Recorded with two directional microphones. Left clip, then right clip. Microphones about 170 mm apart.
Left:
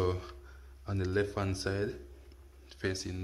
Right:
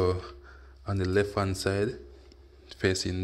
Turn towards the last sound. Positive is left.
turn(degrees=-35)  # may be behind; listen again after turning